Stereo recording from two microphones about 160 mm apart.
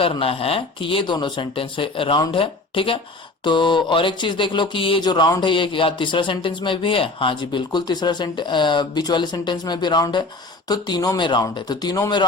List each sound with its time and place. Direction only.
0.0 s speech: 35° left (ahead or behind)